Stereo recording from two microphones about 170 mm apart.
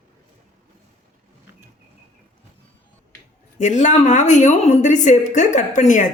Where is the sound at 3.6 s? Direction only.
45° left (ahead or behind).